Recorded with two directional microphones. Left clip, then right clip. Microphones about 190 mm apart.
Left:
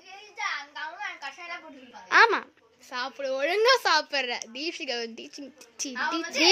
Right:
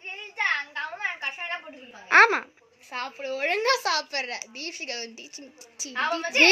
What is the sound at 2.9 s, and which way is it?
Speech, 60° left (ahead or behind).